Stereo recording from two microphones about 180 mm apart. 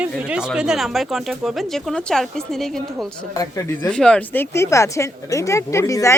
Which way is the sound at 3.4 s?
20° left (ahead or behind).